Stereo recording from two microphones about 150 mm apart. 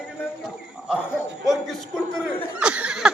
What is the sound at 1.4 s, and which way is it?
Speech, centre (ahead or behind).